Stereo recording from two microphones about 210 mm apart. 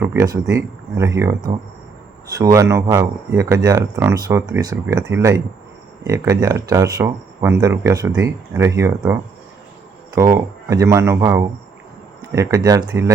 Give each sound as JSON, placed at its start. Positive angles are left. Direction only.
{"t": 0.0, "sound": "speech", "side_deg": -10}
{"t": 10.2, "sound": "speech", "side_deg": -15}